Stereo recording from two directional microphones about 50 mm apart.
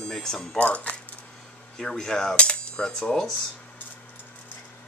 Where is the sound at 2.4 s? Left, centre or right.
Centre.